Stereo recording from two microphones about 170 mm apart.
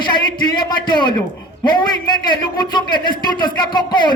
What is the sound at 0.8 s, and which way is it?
A man's voice, 25° left (ahead or behind).